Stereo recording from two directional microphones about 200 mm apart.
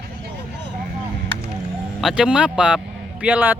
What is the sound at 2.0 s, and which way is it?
Speech, 5° right (ahead or behind).